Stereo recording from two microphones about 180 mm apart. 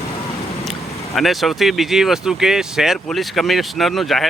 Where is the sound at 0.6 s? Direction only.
Centre (ahead or behind).